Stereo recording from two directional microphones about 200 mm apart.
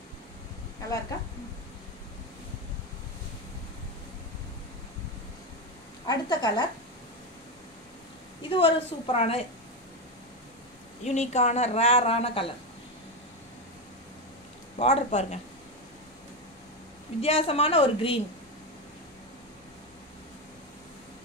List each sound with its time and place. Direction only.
6.0 s a woman's voice: 20° left (ahead or behind)
8.4 s a woman's voice: 25° left (ahead or behind)
11.1 s speech: 35° left (ahead or behind)
14.8 s speech: 30° left (ahead or behind)
17.2 s a woman's voice: 30° left (ahead or behind)